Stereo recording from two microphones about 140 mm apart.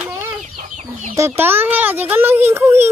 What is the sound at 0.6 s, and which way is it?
Chicken, 60° right (ahead or behind).